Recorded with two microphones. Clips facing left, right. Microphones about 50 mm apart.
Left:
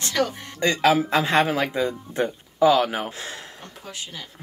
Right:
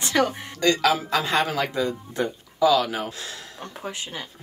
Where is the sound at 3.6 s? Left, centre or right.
Right.